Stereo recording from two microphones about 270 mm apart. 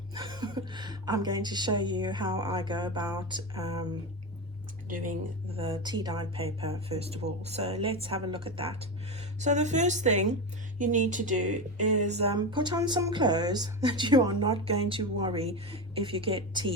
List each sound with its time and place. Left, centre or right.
0.1 s speech: centre
4.9 s speech: right
5.5 s speech: centre